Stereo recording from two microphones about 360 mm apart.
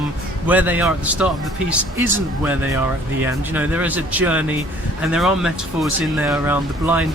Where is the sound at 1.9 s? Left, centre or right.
Right.